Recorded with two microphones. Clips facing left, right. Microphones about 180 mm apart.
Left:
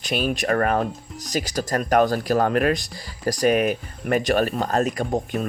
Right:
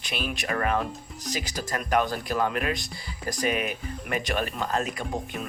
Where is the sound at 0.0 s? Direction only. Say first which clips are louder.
Left 8 dB; 40° left (ahead or behind).